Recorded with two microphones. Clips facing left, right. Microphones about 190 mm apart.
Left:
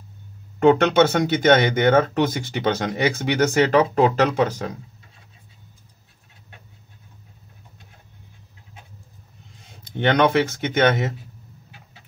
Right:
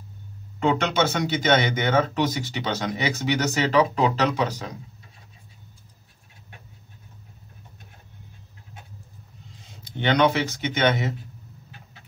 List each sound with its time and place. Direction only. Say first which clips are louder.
0.6 s speech: left 7 dB; 55° left (ahead or behind)
9.8 s speech: left 2 dB; 55° left (ahead or behind)